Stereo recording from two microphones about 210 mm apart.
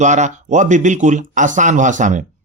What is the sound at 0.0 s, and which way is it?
Speech, 35° right (ahead or behind).